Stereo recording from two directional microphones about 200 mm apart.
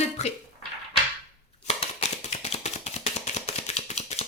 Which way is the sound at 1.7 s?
30° left (ahead or behind).